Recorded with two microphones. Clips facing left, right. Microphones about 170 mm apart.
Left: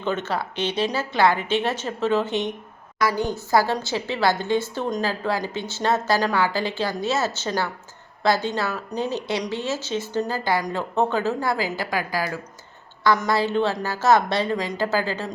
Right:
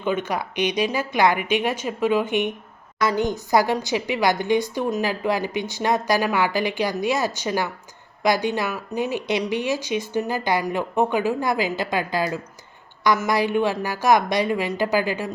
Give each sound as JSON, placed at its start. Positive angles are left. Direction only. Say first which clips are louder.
{"t": 0.0, "sound": "a woman's voice", "louder": "right 1 dB", "side_deg": -10}